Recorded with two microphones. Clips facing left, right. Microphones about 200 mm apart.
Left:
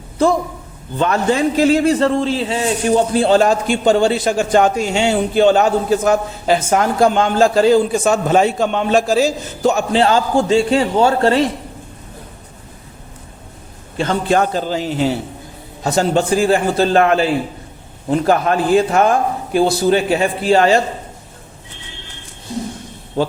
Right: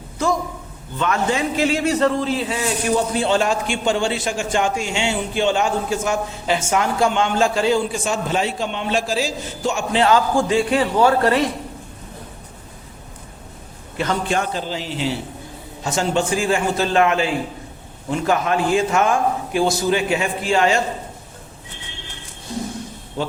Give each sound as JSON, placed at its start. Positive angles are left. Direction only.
{"t": 0.9, "sound": "a man's voice", "side_deg": 35}
{"t": 13.9, "sound": "a man's voice", "side_deg": 30}